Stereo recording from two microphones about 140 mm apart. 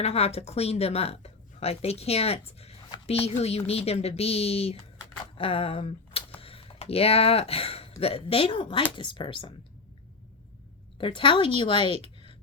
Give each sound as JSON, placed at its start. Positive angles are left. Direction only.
{"t": 0.0, "sound": "a woman's voice", "side_deg": 50}
{"t": 10.9, "sound": "a woman's voice", "side_deg": 40}